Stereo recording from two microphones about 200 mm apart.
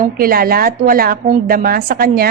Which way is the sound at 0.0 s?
45° right (ahead or behind).